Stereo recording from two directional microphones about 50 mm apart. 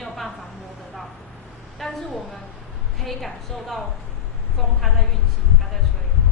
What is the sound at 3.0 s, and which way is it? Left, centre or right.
Speech, centre.